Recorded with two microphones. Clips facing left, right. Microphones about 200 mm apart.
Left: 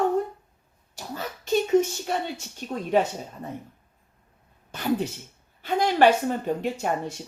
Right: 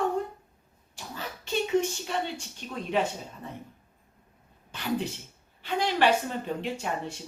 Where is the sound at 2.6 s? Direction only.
45° left (ahead or behind).